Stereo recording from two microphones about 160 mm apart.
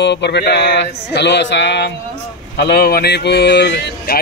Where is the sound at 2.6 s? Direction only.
80° left.